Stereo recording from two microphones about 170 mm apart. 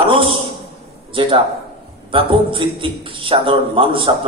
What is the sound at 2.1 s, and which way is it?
A man's voice, 30° right (ahead or behind).